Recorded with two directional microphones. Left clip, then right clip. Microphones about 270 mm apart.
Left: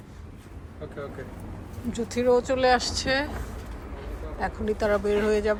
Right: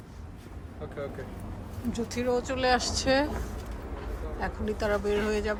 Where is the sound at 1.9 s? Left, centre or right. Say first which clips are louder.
Left 7 dB; centre.